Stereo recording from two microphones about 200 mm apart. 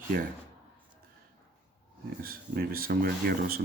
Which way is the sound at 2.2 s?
45° right (ahead or behind).